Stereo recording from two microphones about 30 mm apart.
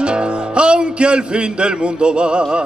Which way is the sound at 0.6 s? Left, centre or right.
Right.